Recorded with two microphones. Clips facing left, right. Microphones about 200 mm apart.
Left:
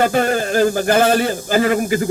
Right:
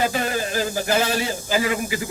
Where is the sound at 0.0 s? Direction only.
55° left (ahead or behind).